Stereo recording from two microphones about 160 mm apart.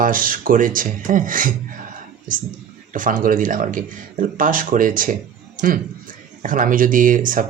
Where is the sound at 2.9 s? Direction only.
55° right (ahead or behind).